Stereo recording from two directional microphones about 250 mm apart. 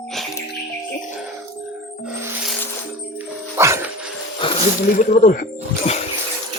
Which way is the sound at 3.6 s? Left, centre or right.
Centre.